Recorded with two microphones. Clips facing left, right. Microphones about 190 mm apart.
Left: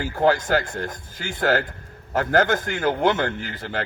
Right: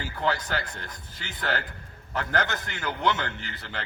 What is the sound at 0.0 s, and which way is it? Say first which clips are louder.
A man's voice: left 9 dB; 45° left (ahead or behind).